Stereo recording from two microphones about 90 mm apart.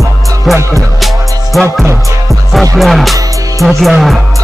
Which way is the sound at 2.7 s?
Centre (ahead or behind).